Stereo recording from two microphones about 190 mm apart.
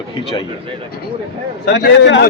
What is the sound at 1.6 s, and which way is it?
Speech, 60° left (ahead or behind).